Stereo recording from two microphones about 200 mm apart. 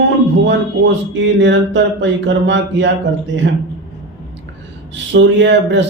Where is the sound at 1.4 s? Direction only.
65° right (ahead or behind).